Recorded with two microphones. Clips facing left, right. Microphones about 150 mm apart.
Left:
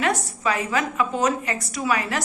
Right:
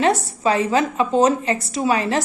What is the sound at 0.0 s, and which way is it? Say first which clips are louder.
A woman's voice: right 5 dB; 30° right (ahead or behind).